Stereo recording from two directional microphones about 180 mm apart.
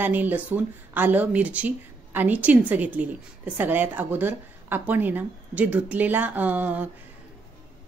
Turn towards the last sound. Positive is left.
turn(degrees=-10)  # may be behind; listen again after turning